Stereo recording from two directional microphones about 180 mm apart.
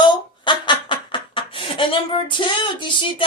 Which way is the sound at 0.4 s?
25° left (ahead or behind).